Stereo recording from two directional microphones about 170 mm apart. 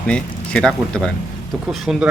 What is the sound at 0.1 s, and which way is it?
Speech, 5° left (ahead or behind).